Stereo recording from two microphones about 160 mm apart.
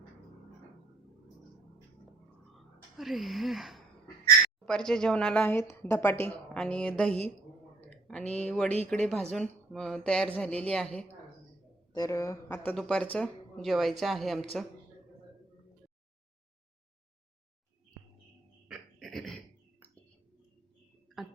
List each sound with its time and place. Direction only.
2.6 s a woman's voice: centre (ahead or behind)
7.8 s a sound: 5° left (ahead or behind)
8.3 s a woman's voice: 5° left (ahead or behind)
11.9 s a woman's voice: 20° left (ahead or behind)
12.7 s speech: 5° left (ahead or behind)
18.7 s a sound: centre (ahead or behind)